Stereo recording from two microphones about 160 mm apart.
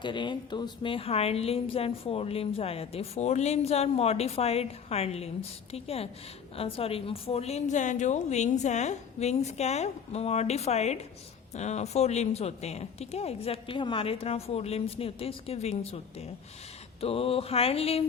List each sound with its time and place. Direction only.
0.0 s a woman's voice: 30° left (ahead or behind)